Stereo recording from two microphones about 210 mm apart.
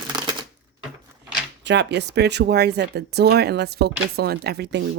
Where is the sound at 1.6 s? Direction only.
55° right (ahead or behind).